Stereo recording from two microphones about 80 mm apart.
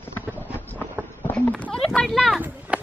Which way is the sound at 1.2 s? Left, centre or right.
Centre.